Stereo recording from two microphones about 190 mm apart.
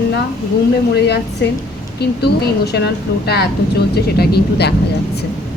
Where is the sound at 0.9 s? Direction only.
60° left (ahead or behind).